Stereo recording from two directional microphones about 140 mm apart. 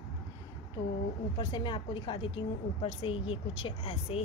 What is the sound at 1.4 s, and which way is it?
A woman's voice, 35° left (ahead or behind).